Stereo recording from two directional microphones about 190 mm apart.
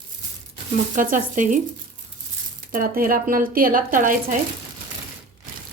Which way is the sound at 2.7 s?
50° right (ahead or behind).